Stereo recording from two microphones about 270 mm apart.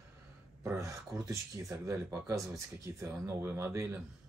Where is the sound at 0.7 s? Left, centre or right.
Centre.